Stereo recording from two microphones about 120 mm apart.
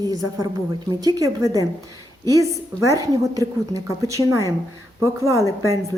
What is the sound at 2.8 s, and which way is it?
A woman's voice, 30° right (ahead or behind).